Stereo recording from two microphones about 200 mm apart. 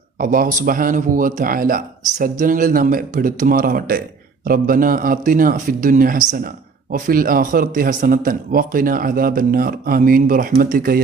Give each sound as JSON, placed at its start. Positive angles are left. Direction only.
{"t": 0.2, "sound": "speech", "side_deg": -40}